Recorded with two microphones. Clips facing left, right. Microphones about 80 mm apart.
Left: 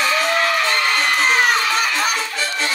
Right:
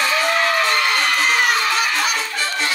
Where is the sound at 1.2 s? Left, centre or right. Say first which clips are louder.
Left 3 dB; left.